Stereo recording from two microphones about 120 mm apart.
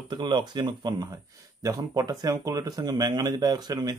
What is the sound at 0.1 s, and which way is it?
Speech, 40° right (ahead or behind).